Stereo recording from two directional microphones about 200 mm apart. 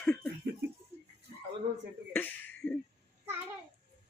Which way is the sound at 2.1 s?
10° left (ahead or behind).